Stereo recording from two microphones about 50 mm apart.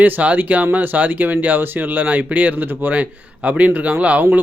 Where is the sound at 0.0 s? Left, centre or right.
Right.